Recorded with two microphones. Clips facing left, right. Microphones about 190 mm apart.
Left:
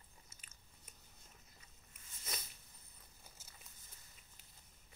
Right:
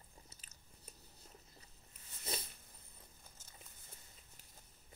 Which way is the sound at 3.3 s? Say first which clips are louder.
Even; 10° left (ahead or behind).